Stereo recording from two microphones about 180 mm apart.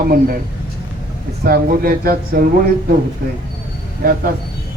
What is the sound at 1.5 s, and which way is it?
Speech, 55° right (ahead or behind).